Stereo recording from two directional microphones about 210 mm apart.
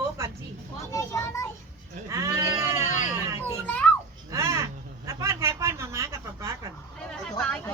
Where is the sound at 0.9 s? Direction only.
15° left (ahead or behind).